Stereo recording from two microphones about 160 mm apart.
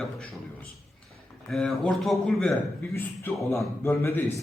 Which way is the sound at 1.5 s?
5° left (ahead or behind).